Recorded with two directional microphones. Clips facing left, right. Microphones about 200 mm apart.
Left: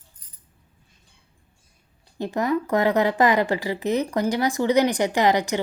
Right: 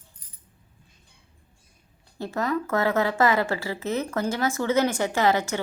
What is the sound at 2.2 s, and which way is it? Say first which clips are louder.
A woman's voice: left 3 dB; 15° left (ahead or behind).